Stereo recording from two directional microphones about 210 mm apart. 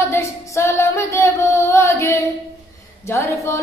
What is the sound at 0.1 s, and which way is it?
Music, 15° left (ahead or behind).